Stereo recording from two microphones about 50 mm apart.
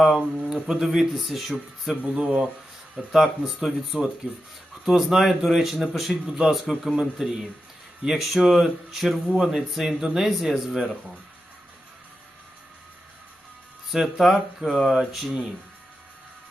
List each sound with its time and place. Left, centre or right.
0.5 s speech: centre
1.9 s speech: centre
4.2 s speech: centre
4.9 s speech: centre
6.2 s speech: centre
6.5 s speech: centre
13.9 s speech: centre